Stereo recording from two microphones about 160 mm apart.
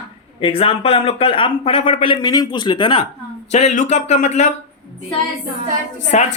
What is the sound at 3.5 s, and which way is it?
Speech, 45° left (ahead or behind).